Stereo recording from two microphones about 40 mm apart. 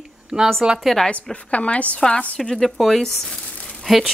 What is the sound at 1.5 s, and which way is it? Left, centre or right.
Speech, left.